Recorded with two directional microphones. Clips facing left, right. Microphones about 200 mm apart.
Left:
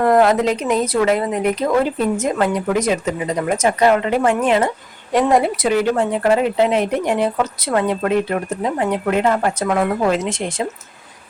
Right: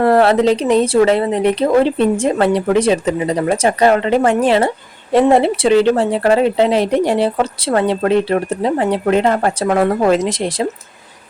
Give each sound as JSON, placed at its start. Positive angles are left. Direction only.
{"t": 0.0, "sound": "speech", "side_deg": -30}